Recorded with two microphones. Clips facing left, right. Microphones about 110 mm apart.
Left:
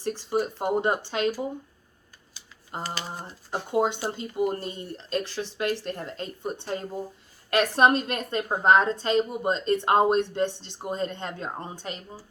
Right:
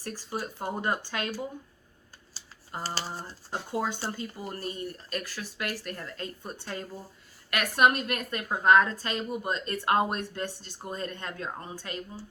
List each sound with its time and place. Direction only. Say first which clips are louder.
0.0 s a woman's voice: left 8 dB; 25° left (ahead or behind)
2.8 s speech: even; 30° right (ahead or behind)
3.5 s a woman's voice: left 6 dB; 20° left (ahead or behind)